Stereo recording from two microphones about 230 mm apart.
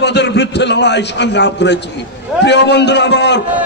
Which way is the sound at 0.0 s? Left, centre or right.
Left.